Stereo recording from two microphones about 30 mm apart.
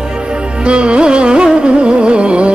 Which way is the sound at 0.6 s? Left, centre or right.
Right.